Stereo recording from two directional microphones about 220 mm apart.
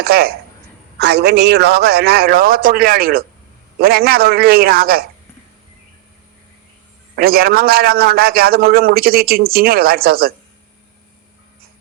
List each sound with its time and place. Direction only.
0.0 s a man's voice: 45° right (ahead or behind)
7.2 s a man's voice: 45° right (ahead or behind)